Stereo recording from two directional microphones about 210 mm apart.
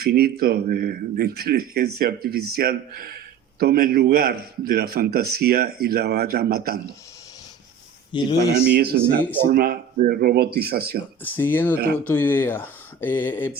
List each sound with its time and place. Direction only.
0.0 s a man's voice: 45° right (ahead or behind)
8.1 s speech: 20° left (ahead or behind)
8.7 s a man's voice: 50° right (ahead or behind)
11.2 s speech: 10° left (ahead or behind)